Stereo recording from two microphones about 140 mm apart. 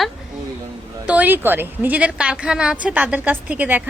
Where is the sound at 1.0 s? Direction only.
10° right (ahead or behind).